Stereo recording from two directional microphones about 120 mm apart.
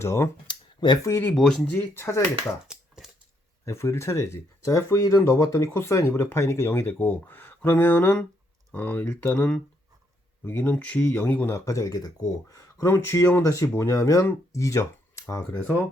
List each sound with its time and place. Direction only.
0.0 s speech: 25° left (ahead or behind)
0.4 s a sound: 40° left (ahead or behind)
1.0 s speech: 20° left (ahead or behind)
1.3 s speech: 5° left (ahead or behind)
1.9 s speech: 20° left (ahead or behind)
2.6 s a sound: 5° right (ahead or behind)
3.7 s speech: 25° left (ahead or behind)